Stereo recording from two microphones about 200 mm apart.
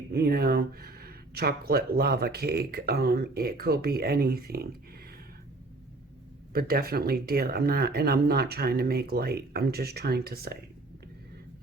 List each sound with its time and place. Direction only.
0.1 s speech: 50° right (ahead or behind)
6.5 s speech: 50° right (ahead or behind)